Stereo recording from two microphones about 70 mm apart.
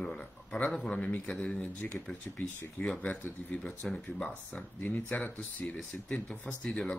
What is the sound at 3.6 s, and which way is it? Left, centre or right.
Speech, centre.